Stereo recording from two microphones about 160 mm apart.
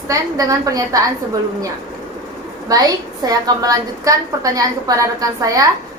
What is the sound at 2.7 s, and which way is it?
A woman's voice, 25° right (ahead or behind).